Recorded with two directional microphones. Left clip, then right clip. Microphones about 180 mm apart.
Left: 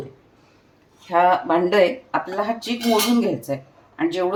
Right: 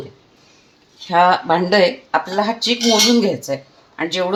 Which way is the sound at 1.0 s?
35° right (ahead or behind).